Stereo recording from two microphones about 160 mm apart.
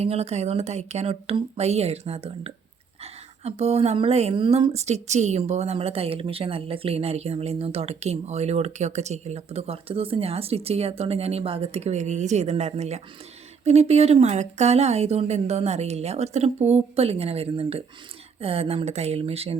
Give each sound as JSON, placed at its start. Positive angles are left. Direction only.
{"t": 0.0, "sound": "speech", "side_deg": -40}